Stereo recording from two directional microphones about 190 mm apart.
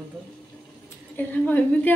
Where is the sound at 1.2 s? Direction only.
10° left (ahead or behind).